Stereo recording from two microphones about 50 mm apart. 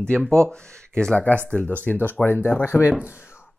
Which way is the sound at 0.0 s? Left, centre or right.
Left.